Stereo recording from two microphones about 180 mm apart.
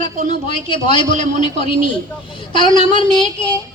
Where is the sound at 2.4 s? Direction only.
25° left (ahead or behind).